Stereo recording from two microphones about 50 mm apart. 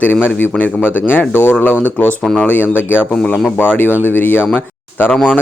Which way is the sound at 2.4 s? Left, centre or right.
Left.